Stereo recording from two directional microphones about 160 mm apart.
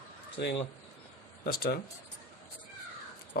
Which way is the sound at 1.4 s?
75° left (ahead or behind).